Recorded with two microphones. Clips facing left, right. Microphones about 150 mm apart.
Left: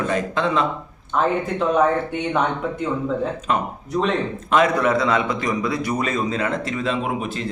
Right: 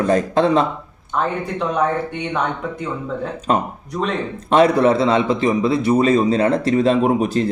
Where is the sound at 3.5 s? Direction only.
40° right (ahead or behind).